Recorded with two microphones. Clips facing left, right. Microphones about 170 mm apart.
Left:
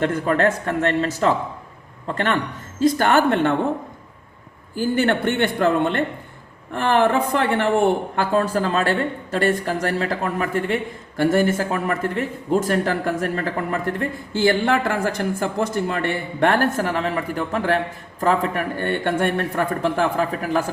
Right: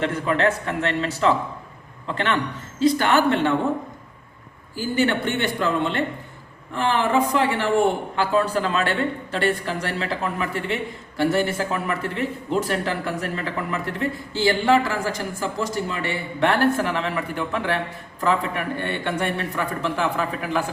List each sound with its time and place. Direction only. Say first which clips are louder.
0.0 s speech: left 2 dB; 45° left (ahead or behind)
2.7 s speech: left 2 dB; 45° left (ahead or behind)
4.7 s speech: left 2 dB; 55° left (ahead or behind)